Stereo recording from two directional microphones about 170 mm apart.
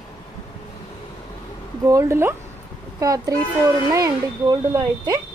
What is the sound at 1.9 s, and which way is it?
A woman's voice, 15° right (ahead or behind).